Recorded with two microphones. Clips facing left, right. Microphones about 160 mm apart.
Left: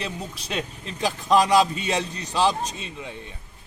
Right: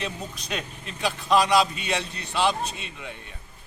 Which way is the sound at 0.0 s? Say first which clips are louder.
Left 1 dB; 30° left (ahead or behind).